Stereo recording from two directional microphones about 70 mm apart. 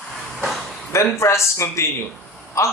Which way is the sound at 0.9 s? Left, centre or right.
Left.